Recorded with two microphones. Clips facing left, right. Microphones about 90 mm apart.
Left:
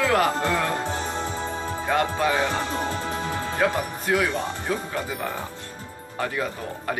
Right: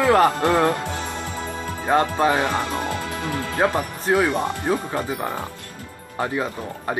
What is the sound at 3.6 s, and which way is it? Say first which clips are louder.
Speech: right 3 dB; 30° right (ahead or behind).